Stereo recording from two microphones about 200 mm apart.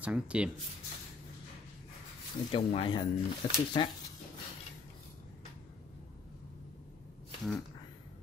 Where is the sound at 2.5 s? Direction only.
25° left (ahead or behind).